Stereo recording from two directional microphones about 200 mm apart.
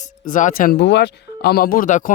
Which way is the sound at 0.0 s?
40° left (ahead or behind).